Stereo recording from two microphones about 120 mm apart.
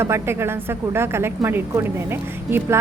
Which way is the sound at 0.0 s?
20° right (ahead or behind).